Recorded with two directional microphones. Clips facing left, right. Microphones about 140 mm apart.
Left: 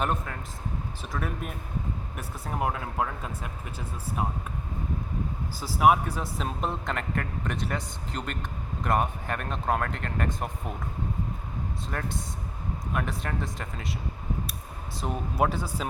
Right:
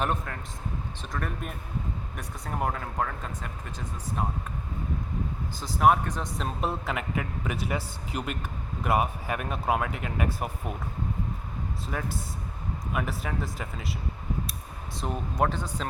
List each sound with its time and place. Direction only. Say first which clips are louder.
0.0 s a man's voice: even; centre (ahead or behind)
5.5 s a man's voice: left 1 dB; 5° left (ahead or behind)
11.9 s a man's voice: right 1 dB; 5° right (ahead or behind)
15.0 s speech: left 1 dB; 5° left (ahead or behind)